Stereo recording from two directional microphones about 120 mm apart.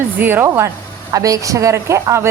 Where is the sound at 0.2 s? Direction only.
15° right (ahead or behind).